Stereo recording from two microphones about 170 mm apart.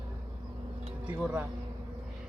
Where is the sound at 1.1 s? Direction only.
10° right (ahead or behind).